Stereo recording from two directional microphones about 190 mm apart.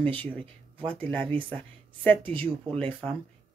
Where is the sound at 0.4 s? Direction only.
25° right (ahead or behind).